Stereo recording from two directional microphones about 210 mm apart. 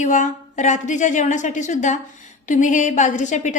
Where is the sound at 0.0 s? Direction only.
35° left (ahead or behind).